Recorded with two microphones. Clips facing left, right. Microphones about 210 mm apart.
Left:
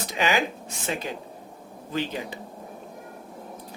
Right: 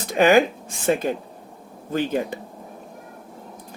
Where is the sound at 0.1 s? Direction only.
50° right (ahead or behind).